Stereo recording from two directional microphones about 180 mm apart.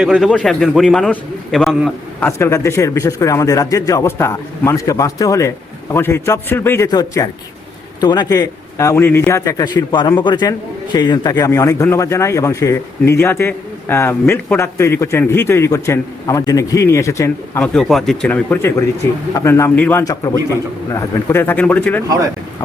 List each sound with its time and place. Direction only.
0.0 s a man's voice: centre (ahead or behind)
2.2 s a man's voice: 15° left (ahead or behind)
17.6 s a man's voice: centre (ahead or behind)